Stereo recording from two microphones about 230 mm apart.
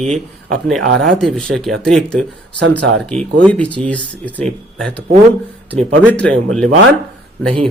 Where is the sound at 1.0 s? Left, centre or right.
Centre.